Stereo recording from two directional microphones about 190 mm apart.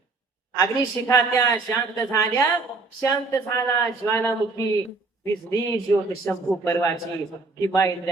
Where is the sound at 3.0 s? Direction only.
15° left (ahead or behind).